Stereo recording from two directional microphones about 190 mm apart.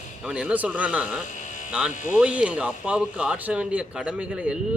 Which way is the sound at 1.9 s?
40° left (ahead or behind).